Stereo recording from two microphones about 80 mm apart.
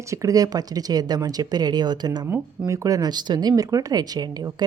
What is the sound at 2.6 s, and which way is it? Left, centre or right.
Speech, right.